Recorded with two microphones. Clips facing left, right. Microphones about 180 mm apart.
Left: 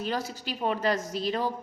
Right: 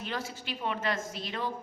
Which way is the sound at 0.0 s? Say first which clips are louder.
Left 5 dB; 35° left (ahead or behind).